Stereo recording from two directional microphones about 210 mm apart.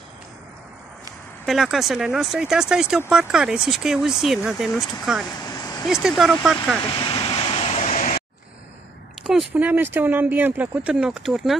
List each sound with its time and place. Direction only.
1.4 s speech: centre (ahead or behind)
5.4 s vehicle: 20° left (ahead or behind)
5.9 s speech: centre (ahead or behind)
7.0 s vehicle: 25° left (ahead or behind)
9.2 s speech: 5° right (ahead or behind)